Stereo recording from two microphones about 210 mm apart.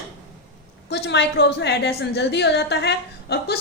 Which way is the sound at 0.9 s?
55° left (ahead or behind).